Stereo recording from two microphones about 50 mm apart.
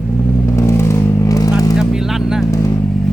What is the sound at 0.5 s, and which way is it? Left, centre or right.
Vehicle, left.